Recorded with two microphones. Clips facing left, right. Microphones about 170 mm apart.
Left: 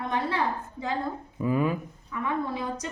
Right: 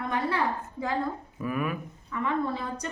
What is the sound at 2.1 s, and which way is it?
Speech, 10° left (ahead or behind).